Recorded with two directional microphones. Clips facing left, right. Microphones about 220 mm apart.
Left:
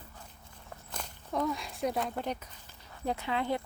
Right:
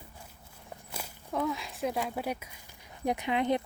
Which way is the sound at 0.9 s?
10° right (ahead or behind).